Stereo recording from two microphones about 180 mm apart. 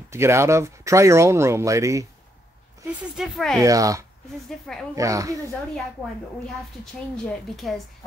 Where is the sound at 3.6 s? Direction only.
20° right (ahead or behind).